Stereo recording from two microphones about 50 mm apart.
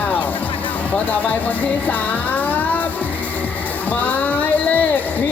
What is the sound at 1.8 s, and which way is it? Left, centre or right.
Music, left.